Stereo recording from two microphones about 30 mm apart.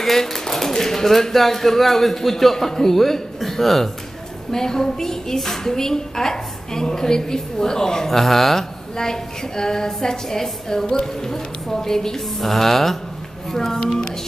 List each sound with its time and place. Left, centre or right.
0.0 s a man's voice: centre
4.5 s a woman's voice: left
8.1 s speech: centre
8.9 s a woman's voice: centre